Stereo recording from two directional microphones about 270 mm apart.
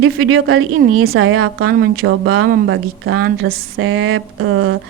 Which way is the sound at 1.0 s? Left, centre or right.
Right.